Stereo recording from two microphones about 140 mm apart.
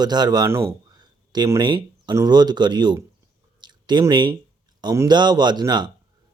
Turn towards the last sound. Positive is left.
turn(degrees=-30)  # may be behind; listen again after turning